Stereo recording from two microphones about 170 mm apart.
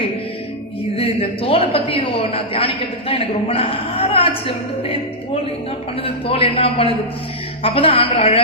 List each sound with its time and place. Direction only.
0.9 s a woman's voice: 35° left (ahead or behind)